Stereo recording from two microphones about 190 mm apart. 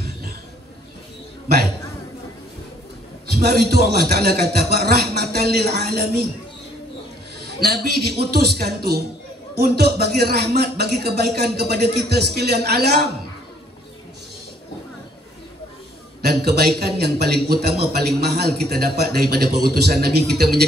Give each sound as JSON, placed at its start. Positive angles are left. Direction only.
{"t": 3.4, "sound": "speech", "side_deg": -60}
{"t": 7.4, "sound": "speech", "side_deg": -60}
{"t": 16.3, "sound": "speech", "side_deg": -60}